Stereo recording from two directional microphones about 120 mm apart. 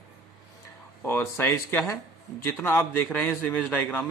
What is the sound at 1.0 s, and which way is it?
A man's voice, 20° left (ahead or behind).